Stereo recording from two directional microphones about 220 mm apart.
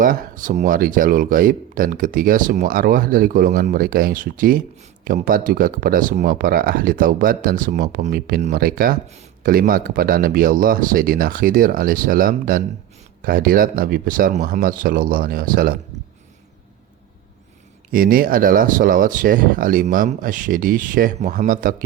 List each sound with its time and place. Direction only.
0.0 s speech: 40° right (ahead or behind)
17.9 s speech: 40° right (ahead or behind)